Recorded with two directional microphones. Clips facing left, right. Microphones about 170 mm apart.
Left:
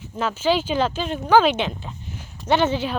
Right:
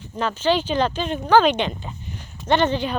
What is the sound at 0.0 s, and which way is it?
Speech, 5° left (ahead or behind).